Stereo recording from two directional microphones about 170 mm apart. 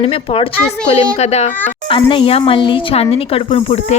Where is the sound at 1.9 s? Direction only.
30° left (ahead or behind).